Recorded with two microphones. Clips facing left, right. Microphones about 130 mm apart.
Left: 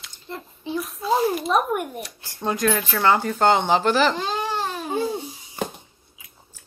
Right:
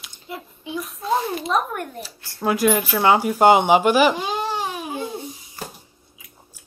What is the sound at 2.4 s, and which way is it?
Speech, 10° right (ahead or behind).